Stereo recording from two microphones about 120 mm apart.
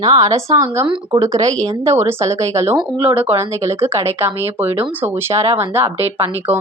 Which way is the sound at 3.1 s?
50° right (ahead or behind).